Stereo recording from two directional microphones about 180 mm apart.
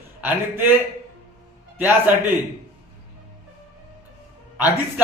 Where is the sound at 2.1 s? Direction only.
10° right (ahead or behind).